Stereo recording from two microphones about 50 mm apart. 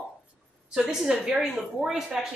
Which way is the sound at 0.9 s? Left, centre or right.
Centre.